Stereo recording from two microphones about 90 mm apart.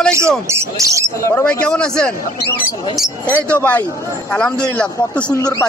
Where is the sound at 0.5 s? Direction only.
30° right (ahead or behind).